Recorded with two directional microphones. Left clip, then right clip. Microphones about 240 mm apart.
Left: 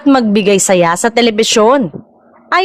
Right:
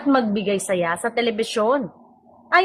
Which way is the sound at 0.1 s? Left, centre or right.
Left.